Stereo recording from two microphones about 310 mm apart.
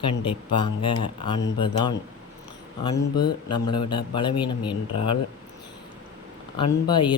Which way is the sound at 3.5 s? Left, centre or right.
Centre.